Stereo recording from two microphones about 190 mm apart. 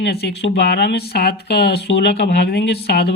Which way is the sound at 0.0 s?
60° left (ahead or behind).